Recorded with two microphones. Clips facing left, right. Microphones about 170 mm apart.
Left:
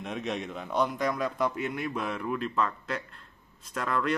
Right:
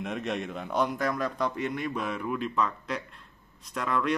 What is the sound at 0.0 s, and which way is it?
Speech, centre (ahead or behind).